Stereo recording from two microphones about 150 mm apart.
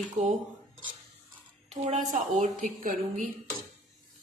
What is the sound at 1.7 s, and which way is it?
Speech, 50° right (ahead or behind).